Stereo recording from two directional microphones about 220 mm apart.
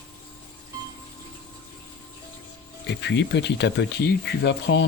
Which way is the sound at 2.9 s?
55° left (ahead or behind).